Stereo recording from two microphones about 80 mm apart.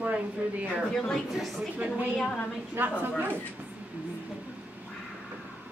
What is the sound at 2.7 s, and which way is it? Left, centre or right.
Speech, right.